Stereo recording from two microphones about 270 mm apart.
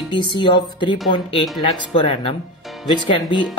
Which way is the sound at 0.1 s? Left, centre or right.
Centre.